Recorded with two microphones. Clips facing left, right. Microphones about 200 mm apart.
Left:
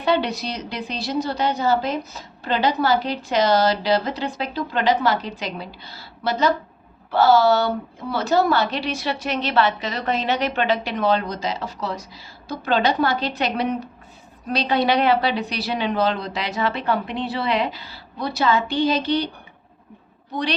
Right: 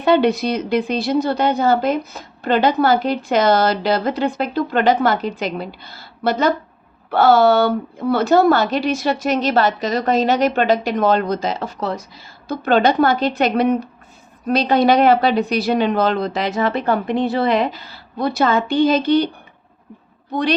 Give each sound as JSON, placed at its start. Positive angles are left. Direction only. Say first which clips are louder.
{"t": 0.0, "sound": "a woman's voice", "louder": "right 7 dB", "side_deg": -50}